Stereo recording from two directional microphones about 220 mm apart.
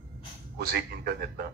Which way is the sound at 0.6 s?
50° right (ahead or behind).